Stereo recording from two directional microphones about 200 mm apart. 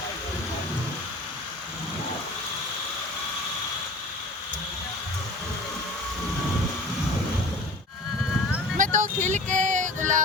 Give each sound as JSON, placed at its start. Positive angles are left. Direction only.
{"t": 8.8, "sound": "music", "side_deg": -40}